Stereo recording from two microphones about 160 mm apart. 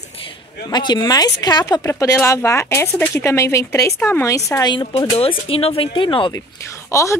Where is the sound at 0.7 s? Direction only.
25° left (ahead or behind).